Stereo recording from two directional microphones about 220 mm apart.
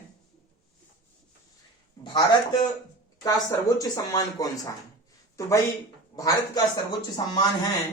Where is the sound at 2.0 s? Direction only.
20° left (ahead or behind).